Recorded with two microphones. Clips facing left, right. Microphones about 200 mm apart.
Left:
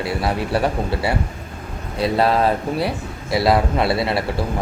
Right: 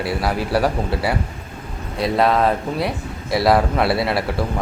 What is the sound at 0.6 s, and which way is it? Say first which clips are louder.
A man's voice: right 1 dB; centre (ahead or behind).